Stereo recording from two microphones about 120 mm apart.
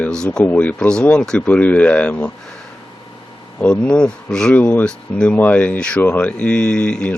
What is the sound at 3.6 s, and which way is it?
Speech, 10° left (ahead or behind).